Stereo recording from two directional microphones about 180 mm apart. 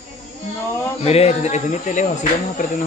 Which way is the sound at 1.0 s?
35° left (ahead or behind).